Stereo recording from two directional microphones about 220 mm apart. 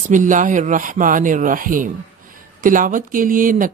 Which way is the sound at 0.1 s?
35° right (ahead or behind).